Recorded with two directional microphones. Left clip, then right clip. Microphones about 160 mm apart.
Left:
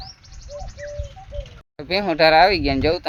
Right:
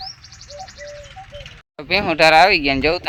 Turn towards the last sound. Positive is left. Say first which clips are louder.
# right 3 dB
turn(degrees=-5)  # may be behind; listen again after turning